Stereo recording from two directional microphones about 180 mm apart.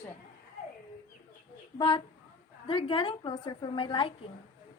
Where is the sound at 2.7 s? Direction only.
30° left (ahead or behind).